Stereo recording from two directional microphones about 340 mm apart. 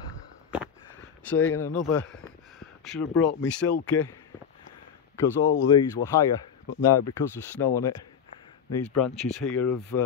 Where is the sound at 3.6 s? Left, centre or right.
Left.